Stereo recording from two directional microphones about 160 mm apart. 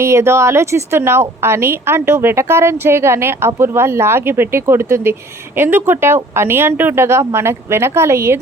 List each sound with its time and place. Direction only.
0.0 s a woman's voice: 15° right (ahead or behind)